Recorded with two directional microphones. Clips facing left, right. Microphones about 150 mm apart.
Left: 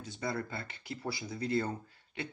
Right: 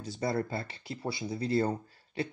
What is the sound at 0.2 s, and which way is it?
Speech, 35° right (ahead or behind).